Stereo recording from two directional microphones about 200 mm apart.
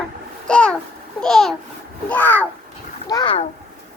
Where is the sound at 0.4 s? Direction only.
5° left (ahead or behind).